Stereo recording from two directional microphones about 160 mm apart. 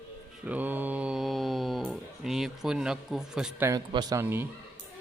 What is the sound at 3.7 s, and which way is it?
Speech, 20° right (ahead or behind).